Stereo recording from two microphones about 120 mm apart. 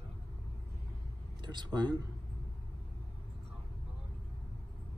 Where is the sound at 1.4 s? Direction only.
40° right (ahead or behind).